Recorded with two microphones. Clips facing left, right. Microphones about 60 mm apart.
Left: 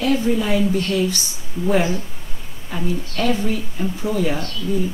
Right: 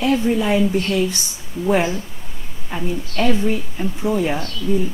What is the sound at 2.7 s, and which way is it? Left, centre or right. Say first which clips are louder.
Speech: even; right.